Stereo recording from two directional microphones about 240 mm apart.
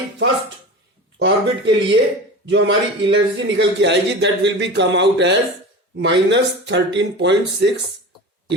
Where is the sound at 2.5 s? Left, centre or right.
Right.